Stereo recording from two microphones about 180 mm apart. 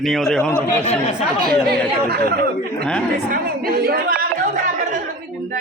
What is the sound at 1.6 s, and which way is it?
Speech, 65° right (ahead or behind).